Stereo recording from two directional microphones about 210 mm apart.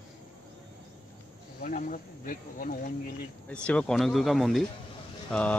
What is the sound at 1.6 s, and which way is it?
Insect, 40° left (ahead or behind).